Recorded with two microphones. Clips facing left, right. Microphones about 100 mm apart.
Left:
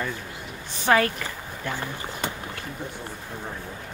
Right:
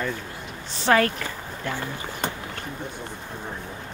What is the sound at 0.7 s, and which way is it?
Speech, 15° left (ahead or behind).